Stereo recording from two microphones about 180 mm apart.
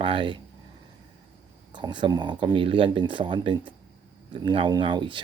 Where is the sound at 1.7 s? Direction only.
25° right (ahead or behind).